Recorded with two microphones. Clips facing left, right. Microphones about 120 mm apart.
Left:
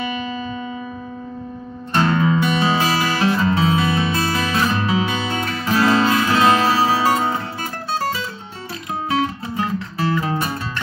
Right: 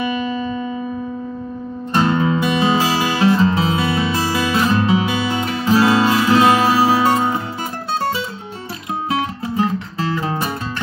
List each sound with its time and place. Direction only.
0.3 s music: 35° right (ahead or behind)
2.0 s music: 20° right (ahead or behind)